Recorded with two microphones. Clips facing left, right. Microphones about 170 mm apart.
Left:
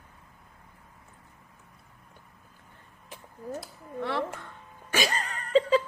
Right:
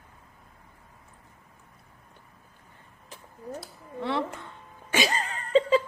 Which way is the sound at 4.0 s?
20° right (ahead or behind).